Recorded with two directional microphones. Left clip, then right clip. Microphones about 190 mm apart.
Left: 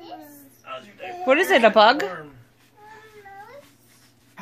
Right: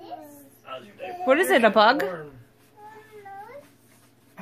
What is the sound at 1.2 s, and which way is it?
Speech, 10° left (ahead or behind).